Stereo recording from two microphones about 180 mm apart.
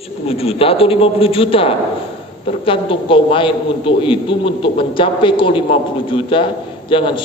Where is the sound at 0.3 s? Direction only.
35° left (ahead or behind).